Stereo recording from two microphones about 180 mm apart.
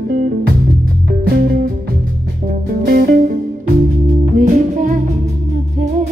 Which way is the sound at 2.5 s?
50° right (ahead or behind).